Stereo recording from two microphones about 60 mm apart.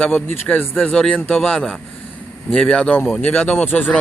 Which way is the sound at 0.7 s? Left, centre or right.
Centre.